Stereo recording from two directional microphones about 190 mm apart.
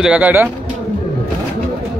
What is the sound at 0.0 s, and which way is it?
Speech, 5° right (ahead or behind).